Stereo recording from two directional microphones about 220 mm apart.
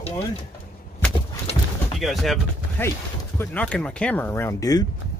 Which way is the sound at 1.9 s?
Centre (ahead or behind).